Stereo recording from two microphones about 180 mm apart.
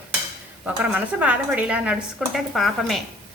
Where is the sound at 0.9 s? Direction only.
5° right (ahead or behind).